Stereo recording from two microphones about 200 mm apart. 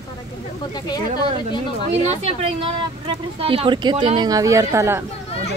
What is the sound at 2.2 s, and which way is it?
A woman's voice, 30° right (ahead or behind).